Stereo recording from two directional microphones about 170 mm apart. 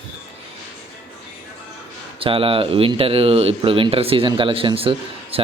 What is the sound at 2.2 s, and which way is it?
Speech, 30° right (ahead or behind).